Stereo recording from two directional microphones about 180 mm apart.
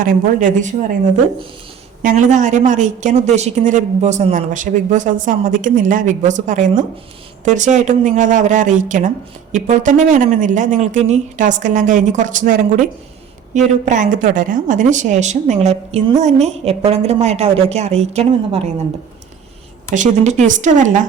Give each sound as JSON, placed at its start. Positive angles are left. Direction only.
{"t": 0.0, "sound": "a woman's voice", "side_deg": -45}
{"t": 2.0, "sound": "a woman's voice", "side_deg": -45}
{"t": 19.9, "sound": "a woman's voice", "side_deg": -45}